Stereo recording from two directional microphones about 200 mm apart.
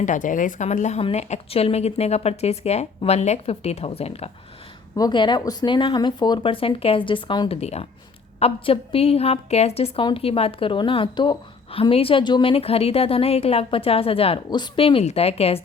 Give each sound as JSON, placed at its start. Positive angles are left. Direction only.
{"t": 0.0, "sound": "a woman's voice", "side_deg": 40}